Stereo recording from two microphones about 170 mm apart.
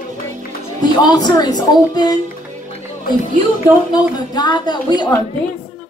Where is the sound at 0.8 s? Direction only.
25° left (ahead or behind).